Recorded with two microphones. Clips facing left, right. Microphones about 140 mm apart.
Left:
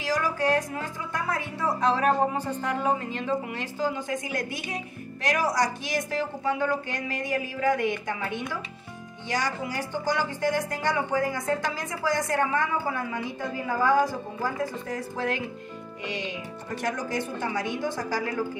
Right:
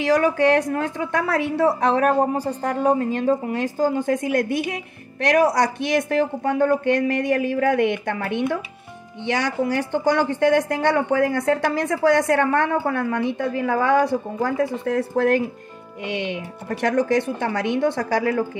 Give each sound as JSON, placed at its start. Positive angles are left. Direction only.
{"t": 0.0, "sound": "a woman's voice", "side_deg": -65}
{"t": 2.3, "sound": "a woman's voice", "side_deg": -40}